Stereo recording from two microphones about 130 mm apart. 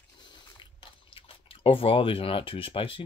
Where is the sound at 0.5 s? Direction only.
45° left (ahead or behind).